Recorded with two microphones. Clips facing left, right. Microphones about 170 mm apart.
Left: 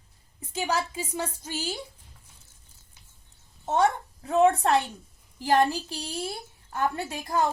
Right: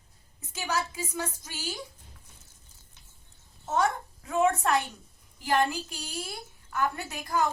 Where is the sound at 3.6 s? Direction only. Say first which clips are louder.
Left 4 dB; 30° left (ahead or behind).